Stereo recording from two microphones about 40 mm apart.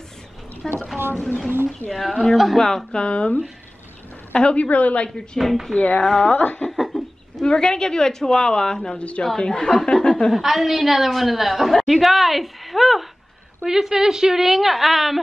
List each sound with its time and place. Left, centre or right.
0.6 s a sound: centre
1.9 s a woman's voice: centre
2.6 s a woman's voice: centre
3.0 s a woman's voice: left
5.4 s a woman's voice: centre
5.8 s a woman's voice: left
6.0 s a woman's voice: centre
6.3 s a woman's voice: left
6.8 s bird: centre
7.4 s a woman's voice: centre
8.9 s a woman's voice: left
9.4 s speech: centre
10.3 s a woman's voice: centre
13.7 s a woman's voice: centre